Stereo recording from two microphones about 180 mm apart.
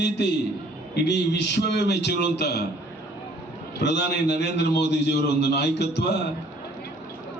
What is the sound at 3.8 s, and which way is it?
A man's voice, 70° left (ahead or behind).